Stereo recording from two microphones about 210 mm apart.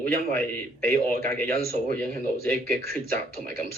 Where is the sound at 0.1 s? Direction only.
40° right (ahead or behind).